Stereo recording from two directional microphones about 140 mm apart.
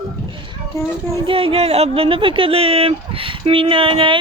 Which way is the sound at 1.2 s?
40° right (ahead or behind).